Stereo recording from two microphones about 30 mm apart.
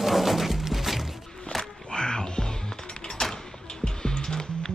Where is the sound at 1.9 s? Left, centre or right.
Left.